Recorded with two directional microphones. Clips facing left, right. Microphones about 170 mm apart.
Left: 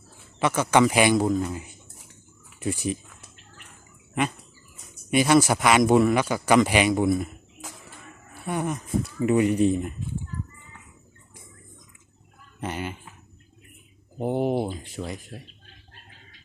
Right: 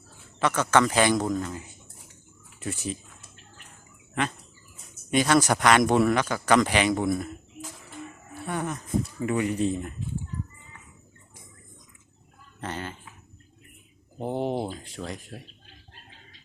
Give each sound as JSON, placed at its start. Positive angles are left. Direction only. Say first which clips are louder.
{"t": 0.3, "sound": "speech", "louder": "left 2 dB", "side_deg": 10}
{"t": 4.1, "sound": "speech", "louder": "left 3 dB", "side_deg": 10}
{"t": 8.4, "sound": "speech", "louder": "left 3 dB", "side_deg": 15}
{"t": 12.5, "sound": "speech", "louder": "left 3 dB", "side_deg": 15}
{"t": 14.2, "sound": "speech", "louder": "left 4 dB", "side_deg": 10}